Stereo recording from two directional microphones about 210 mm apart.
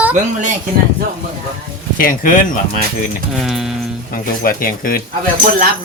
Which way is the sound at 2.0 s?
40° left (ahead or behind).